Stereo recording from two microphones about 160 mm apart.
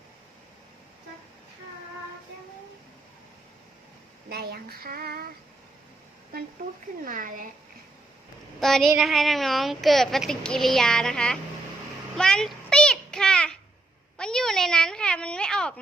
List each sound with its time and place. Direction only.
4.3 s child singing: 85° right
7.0 s speech: 55° right (ahead or behind)
8.6 s speech: centre (ahead or behind)
12.1 s a sound: 5° left (ahead or behind)